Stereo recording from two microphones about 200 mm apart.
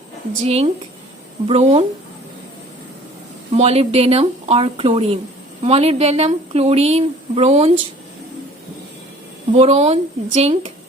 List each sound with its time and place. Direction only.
0.4 s a woman's voice: 30° right (ahead or behind)
3.5 s a woman's voice: 30° right (ahead or behind)
9.5 s a woman's voice: 30° right (ahead or behind)